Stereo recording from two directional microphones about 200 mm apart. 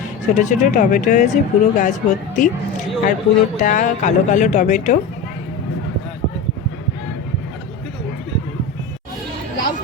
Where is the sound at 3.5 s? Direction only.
40° left (ahead or behind).